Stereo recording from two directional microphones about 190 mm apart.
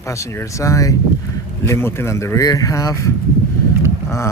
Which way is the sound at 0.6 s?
15° left (ahead or behind).